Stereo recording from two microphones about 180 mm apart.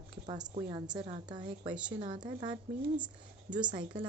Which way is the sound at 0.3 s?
25° right (ahead or behind).